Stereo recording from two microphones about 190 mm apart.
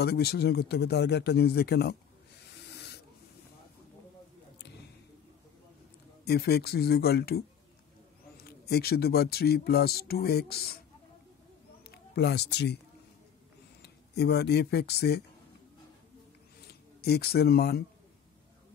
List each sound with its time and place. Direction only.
0.0 s speech: 55° left (ahead or behind)
2.4 s snake: 60° left (ahead or behind)
6.2 s speech: 55° left (ahead or behind)
8.5 s speech: 55° left (ahead or behind)
11.9 s speech: 60° left (ahead or behind)
13.8 s speech: 60° left (ahead or behind)
16.6 s speech: 55° left (ahead or behind)